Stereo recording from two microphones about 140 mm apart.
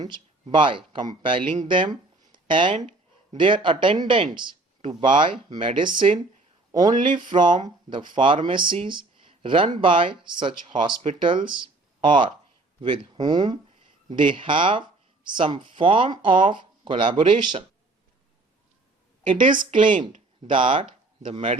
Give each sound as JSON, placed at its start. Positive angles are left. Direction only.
{"t": 0.0, "sound": "speech", "side_deg": -35}
{"t": 19.2, "sound": "a woman's voice", "side_deg": -35}